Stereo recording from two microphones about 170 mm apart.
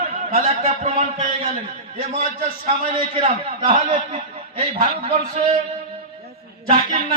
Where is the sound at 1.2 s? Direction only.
55° right (ahead or behind).